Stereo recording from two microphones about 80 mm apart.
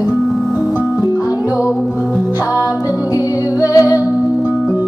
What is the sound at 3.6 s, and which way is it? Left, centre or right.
Music, left.